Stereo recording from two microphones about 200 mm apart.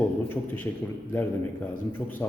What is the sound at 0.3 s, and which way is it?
Speech, 10° left (ahead or behind).